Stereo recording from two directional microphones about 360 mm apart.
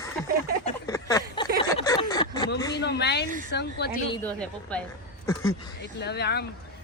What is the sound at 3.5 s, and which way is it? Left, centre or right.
Speech, left.